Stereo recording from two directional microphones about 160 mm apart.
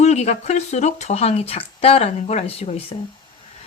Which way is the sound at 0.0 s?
45° left (ahead or behind).